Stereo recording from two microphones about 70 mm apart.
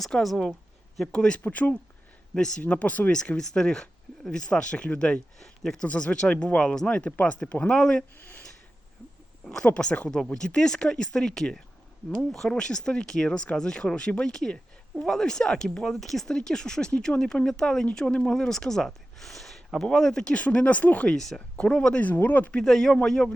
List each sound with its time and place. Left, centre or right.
0.0 s speech: centre
1.1 s speech: centre
5.8 s speech: centre
8.2 s a sound: left
9.4 s speech: centre
9.6 s speech: centre
21.1 s speech: centre
22.0 s speech: left
22.5 s speech: centre